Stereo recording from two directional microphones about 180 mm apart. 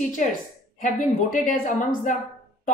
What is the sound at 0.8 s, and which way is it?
A woman's voice, 45° left (ahead or behind).